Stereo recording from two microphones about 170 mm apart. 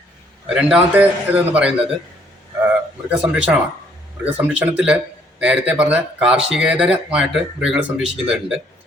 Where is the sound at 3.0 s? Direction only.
10° right (ahead or behind).